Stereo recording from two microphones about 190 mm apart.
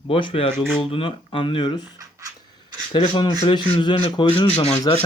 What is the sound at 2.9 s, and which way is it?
Speech, 25° left (ahead or behind).